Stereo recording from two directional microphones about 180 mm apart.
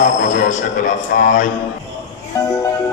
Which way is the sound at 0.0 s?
45° left (ahead or behind).